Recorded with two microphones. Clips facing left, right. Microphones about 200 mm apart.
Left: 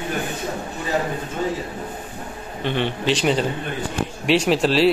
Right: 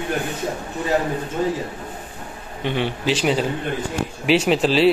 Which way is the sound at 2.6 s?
10° right (ahead or behind).